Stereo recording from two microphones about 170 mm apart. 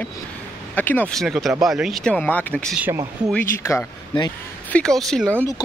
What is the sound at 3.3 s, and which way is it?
Speech, 15° left (ahead or behind).